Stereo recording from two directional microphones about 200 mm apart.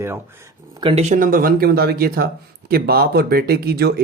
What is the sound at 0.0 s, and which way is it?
Speech, 10° right (ahead or behind).